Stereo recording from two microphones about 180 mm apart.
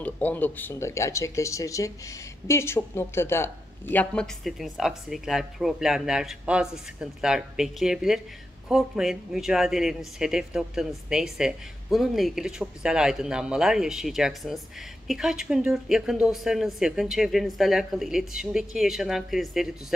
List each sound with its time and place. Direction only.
0.0 s speech: 10° left (ahead or behind)